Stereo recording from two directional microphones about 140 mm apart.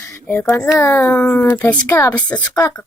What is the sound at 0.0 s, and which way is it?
Speech, 20° left (ahead or behind).